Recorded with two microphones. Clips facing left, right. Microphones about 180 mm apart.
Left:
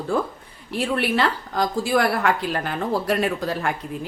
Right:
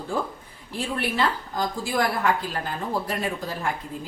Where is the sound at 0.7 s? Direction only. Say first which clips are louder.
Left 5 dB; 70° left (ahead or behind).